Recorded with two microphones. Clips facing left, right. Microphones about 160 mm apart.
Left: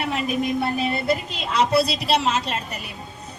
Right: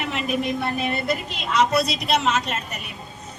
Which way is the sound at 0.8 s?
30° left (ahead or behind).